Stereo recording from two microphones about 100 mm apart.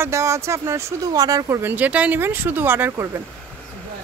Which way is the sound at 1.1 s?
40° right (ahead or behind).